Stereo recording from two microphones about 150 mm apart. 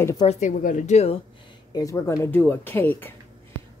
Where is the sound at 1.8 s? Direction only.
20° left (ahead or behind).